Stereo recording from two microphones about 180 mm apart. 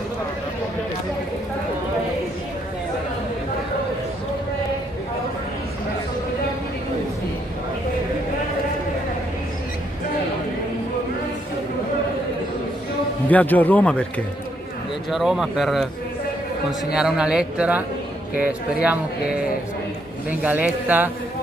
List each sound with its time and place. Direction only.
13.3 s a man's voice: 10° left (ahead or behind)
16.9 s a man's voice: 5° right (ahead or behind)